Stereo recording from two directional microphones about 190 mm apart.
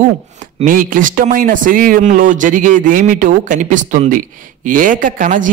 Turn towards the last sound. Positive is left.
turn(degrees=-45)  # may be behind; listen again after turning